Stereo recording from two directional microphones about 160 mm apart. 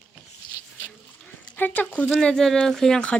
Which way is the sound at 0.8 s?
10° left (ahead or behind).